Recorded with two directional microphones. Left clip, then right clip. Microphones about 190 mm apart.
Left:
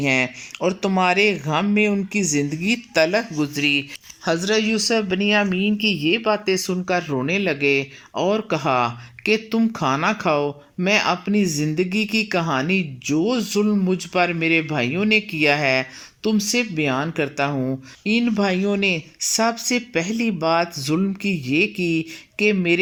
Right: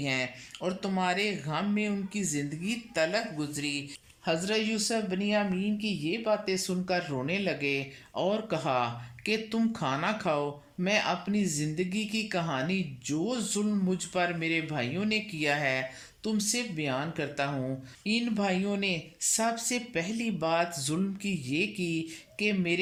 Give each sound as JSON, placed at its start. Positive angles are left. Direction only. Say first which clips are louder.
{"t": 0.0, "sound": "speech", "louder": "left 11 dB", "side_deg": 15}
{"t": 4.4, "sound": "speech", "louder": "left 10 dB", "side_deg": -5}